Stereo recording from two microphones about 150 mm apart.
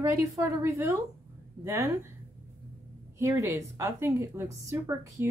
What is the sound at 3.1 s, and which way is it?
A woman's voice, 20° right (ahead or behind).